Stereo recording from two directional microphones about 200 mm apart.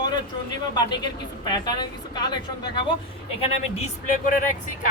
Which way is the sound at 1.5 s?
20° left (ahead or behind).